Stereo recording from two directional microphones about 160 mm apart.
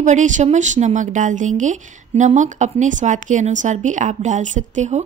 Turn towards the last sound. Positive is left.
turn(degrees=-45)  # may be behind; listen again after turning